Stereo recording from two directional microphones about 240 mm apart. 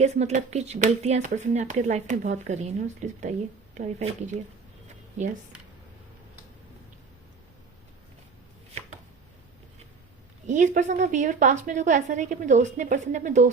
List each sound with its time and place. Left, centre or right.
0.0 s speech: right
10.4 s a woman's voice: right